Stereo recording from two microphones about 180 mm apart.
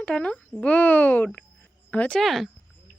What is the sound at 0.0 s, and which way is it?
A child's voice, 5° left (ahead or behind).